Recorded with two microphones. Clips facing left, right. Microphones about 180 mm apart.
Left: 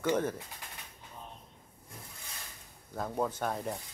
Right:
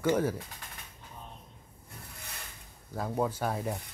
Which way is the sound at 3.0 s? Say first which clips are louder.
Right 2 dB; 5° right (ahead or behind).